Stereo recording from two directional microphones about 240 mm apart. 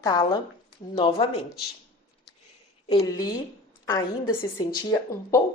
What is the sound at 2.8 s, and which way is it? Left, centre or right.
Speech, centre.